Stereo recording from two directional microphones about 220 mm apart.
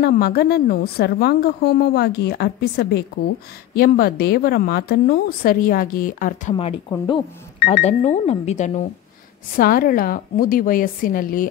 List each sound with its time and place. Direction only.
0.0 s a woman's voice: 45° left (ahead or behind)
6.5 s speech: 20° left (ahead or behind)
7.5 s cash register: 45° left (ahead or behind)
7.8 s speech: 30° left (ahead or behind)